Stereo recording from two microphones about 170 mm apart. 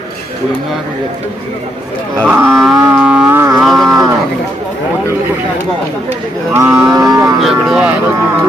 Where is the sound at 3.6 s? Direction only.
Centre (ahead or behind).